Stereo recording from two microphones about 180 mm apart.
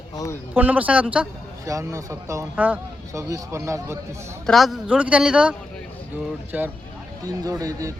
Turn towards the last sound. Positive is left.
turn(degrees=-20)  # may be behind; listen again after turning